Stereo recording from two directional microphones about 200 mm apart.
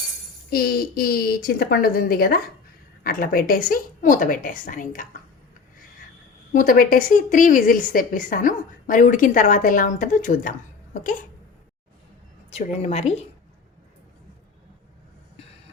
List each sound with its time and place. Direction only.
0.5 s a woman's voice: 50° left (ahead or behind)
6.5 s a woman's voice: 45° left (ahead or behind)
12.5 s a woman's voice: 30° left (ahead or behind)